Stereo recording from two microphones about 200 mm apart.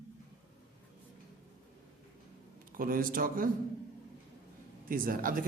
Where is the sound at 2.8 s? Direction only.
45° right (ahead or behind).